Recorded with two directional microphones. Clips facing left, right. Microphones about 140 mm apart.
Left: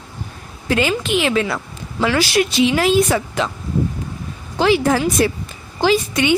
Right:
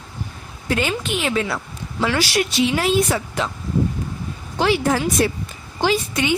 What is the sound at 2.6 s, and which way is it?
Speech, 90° left.